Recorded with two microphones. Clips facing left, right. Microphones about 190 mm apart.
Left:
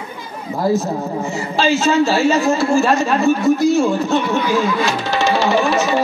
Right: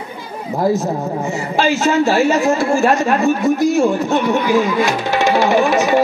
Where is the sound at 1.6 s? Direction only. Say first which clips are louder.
Even; 15° right (ahead or behind).